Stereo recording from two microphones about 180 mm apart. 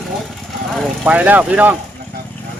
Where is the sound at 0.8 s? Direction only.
10° right (ahead or behind).